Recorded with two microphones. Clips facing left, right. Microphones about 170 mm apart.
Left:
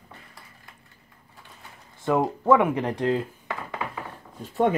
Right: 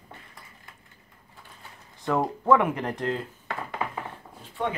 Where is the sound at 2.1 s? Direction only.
20° left (ahead or behind).